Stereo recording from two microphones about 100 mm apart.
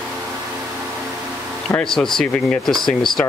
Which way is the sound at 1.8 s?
5° left (ahead or behind).